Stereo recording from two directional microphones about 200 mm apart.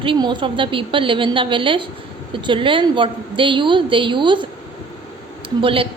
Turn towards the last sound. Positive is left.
turn(degrees=-25)  # may be behind; listen again after turning